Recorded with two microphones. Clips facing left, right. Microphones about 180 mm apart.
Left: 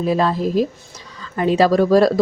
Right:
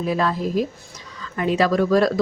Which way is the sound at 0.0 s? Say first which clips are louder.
Left 4 dB; 30° left (ahead or behind).